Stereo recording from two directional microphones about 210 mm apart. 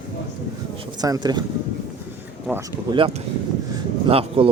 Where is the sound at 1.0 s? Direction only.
20° right (ahead or behind).